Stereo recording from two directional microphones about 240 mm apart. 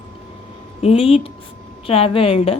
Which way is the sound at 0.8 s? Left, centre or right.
Left.